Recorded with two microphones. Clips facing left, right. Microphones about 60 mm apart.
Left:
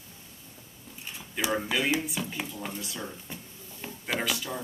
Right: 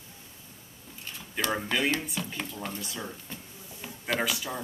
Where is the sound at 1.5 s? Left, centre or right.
Centre.